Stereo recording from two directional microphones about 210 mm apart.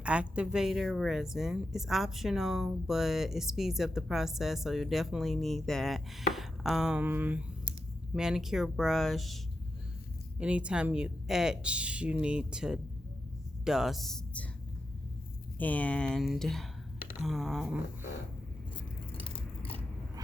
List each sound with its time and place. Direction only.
0.0 s speech: 5° right (ahead or behind)
10.4 s speech: 5° right (ahead or behind)
15.5 s speech: 5° left (ahead or behind)
19.2 s biting: 25° left (ahead or behind)